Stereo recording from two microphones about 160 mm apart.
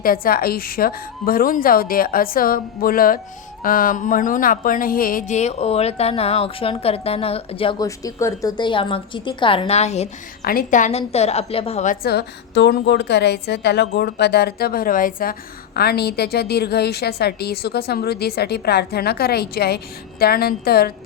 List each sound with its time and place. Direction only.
0.0 s a woman's voice: 65° left (ahead or behind); by 7.8 s 35° left (ahead or behind)
7.8 s speech: 20° left (ahead or behind); by 10.1 s 45° left (ahead or behind)
10.4 s a woman's voice: 65° left (ahead or behind); by 11.9 s 45° left (ahead or behind)
12.0 s a woman's voice: 90° left; by 20.9 s 75° left (ahead or behind)